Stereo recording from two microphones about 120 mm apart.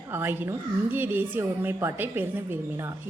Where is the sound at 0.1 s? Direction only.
20° right (ahead or behind).